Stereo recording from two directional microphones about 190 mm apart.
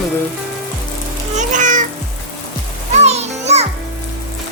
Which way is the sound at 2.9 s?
35° right (ahead or behind).